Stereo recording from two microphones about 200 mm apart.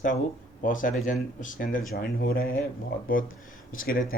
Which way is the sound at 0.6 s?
40° left (ahead or behind).